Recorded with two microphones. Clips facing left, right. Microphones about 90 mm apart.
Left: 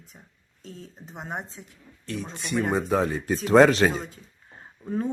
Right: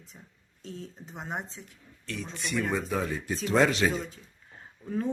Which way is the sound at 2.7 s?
45° left (ahead or behind).